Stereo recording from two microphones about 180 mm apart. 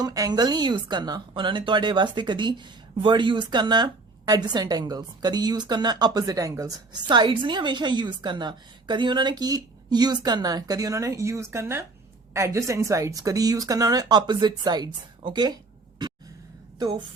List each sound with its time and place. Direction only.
0.0 s a woman's voice: 20° right (ahead or behind)
16.0 s a sound: 25° right (ahead or behind)
16.7 s a woman's voice: 25° right (ahead or behind)